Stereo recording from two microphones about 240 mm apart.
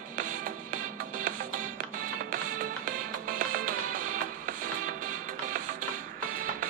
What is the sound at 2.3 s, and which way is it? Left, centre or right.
Music, right.